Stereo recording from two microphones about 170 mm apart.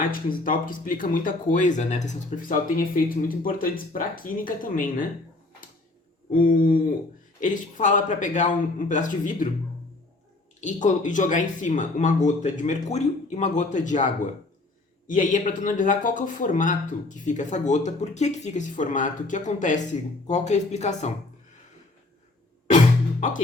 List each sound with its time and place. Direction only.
0.4 s a man's voice: 55° left (ahead or behind)
6.3 s a sound: 55° left (ahead or behind)
7.4 s a man's voice: 50° left (ahead or behind)
10.6 s a man's voice: 45° left (ahead or behind)